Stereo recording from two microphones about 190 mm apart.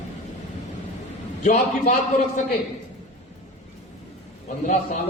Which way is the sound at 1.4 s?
40° left (ahead or behind).